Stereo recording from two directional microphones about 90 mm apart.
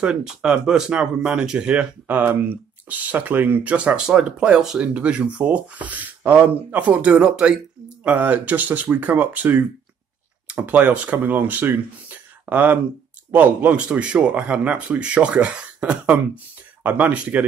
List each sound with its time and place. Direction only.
0.0 s speech: 10° right (ahead or behind)